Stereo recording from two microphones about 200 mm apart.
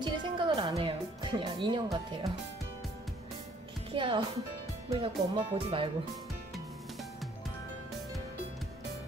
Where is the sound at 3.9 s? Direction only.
25° right (ahead or behind).